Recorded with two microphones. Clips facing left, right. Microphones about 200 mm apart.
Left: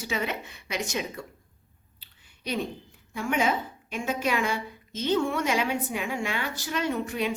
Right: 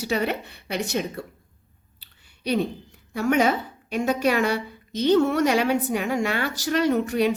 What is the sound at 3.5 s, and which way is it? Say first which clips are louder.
Speech: right 4 dB; 40° right (ahead or behind).